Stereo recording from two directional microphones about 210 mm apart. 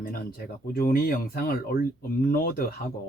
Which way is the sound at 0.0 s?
45° left (ahead or behind).